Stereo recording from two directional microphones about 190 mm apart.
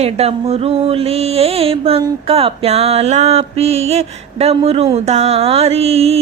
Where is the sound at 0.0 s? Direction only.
35° right (ahead or behind).